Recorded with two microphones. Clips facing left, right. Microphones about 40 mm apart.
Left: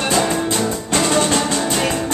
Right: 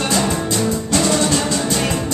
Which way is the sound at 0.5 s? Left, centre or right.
Left.